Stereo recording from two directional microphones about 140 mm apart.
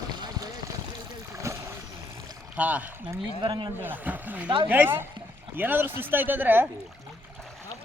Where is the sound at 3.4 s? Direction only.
35° right (ahead or behind).